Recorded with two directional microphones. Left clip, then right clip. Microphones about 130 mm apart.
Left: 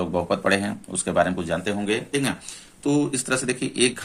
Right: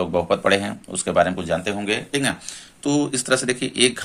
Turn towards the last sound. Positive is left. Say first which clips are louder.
# right 3 dB
turn(degrees=-20)  # may be behind; listen again after turning